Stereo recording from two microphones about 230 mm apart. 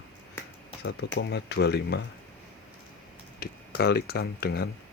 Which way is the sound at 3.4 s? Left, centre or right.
Left.